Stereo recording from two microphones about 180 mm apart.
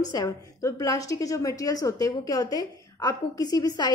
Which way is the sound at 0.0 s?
20° left (ahead or behind).